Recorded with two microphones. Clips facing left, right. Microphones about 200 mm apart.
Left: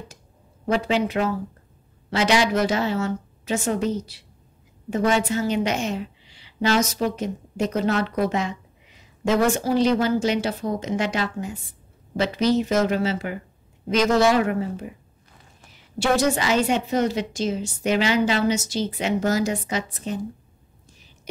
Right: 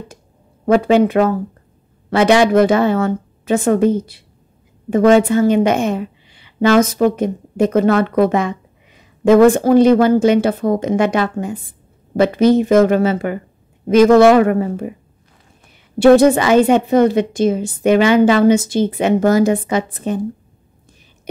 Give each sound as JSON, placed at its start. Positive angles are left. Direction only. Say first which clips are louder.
{"t": 0.7, "sound": "a woman's voice", "louder": "right 10 dB", "side_deg": -55}
{"t": 16.0, "sound": "a woman's voice", "louder": "right 12 dB", "side_deg": -55}